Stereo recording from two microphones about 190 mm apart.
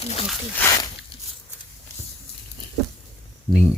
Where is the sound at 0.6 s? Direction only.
20° left (ahead or behind).